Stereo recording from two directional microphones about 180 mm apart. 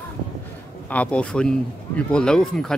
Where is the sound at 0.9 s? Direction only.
5° left (ahead or behind).